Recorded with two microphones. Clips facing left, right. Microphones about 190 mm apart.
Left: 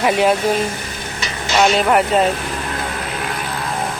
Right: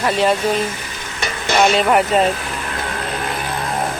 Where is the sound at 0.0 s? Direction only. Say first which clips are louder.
Left 2 dB; 10° left (ahead or behind).